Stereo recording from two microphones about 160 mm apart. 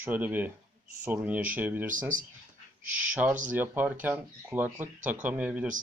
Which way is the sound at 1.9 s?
55° right (ahead or behind).